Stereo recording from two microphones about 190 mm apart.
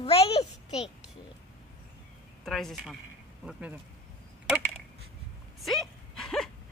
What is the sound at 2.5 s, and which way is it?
Speech, centre (ahead or behind).